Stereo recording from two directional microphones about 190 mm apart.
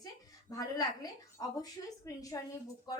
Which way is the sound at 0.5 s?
20° left (ahead or behind).